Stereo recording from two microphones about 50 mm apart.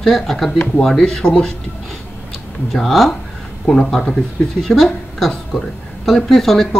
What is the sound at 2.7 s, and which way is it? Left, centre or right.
Speech, centre.